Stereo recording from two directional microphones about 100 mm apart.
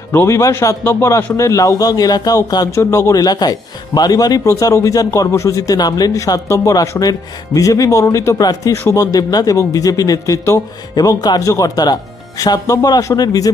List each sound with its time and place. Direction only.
0.1 s speech: 25° left (ahead or behind)